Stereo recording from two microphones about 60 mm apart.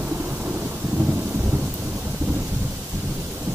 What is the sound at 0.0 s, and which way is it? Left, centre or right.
Thunder, right.